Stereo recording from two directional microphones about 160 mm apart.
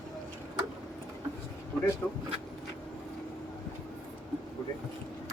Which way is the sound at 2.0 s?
10° left (ahead or behind).